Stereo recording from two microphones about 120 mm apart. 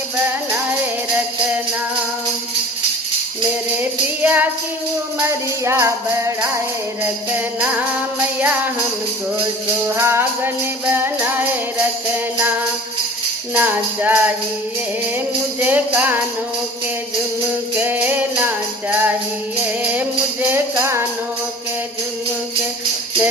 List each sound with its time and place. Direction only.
3.8 s music: 15° right (ahead or behind)
9.9 s music: 20° right (ahead or behind)
15.6 s music: 15° right (ahead or behind)
17.7 s music: 15° right (ahead or behind)